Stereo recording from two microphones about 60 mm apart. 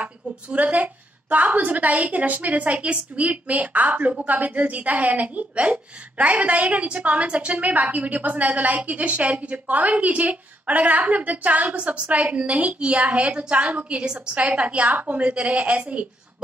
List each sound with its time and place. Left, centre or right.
0.0 s a woman's voice: right